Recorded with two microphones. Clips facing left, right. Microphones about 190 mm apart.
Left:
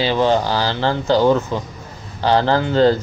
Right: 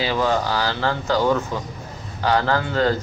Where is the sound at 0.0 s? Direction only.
30° left (ahead or behind).